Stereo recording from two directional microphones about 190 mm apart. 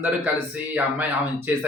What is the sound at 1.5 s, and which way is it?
Speech, 10° right (ahead or behind).